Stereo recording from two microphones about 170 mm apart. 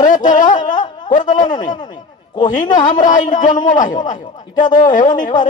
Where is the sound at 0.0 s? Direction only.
50° left (ahead or behind).